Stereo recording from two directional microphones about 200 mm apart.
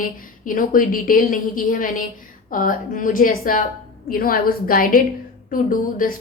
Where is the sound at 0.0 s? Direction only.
45° left (ahead or behind).